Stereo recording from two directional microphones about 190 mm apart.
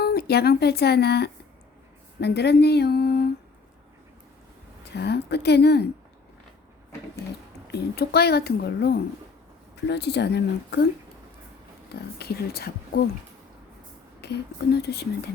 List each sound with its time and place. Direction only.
0.0 s speech: 55° left (ahead or behind)
4.8 s speech: 60° left (ahead or behind)
7.7 s speech: 60° left (ahead or behind)
12.2 s speech: 55° left (ahead or behind)
14.2 s speech: 60° left (ahead or behind)